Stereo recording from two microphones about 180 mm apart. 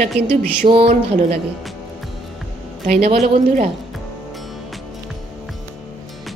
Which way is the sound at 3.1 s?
35° right (ahead or behind).